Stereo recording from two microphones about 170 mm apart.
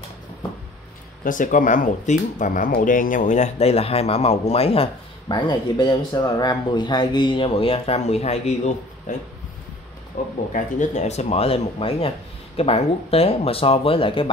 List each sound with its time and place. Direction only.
1.2 s speech: 50° left (ahead or behind)
5.3 s speech: 25° left (ahead or behind); by 9.1 s 40° left (ahead or behind)
10.2 s speech: 55° left (ahead or behind); by 14.3 s 30° left (ahead or behind)